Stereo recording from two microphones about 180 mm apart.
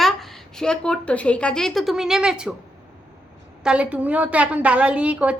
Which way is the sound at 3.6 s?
5° right (ahead or behind).